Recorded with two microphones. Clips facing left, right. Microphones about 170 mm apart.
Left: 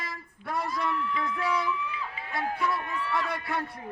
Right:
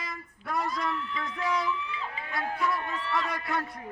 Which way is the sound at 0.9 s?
25° right (ahead or behind).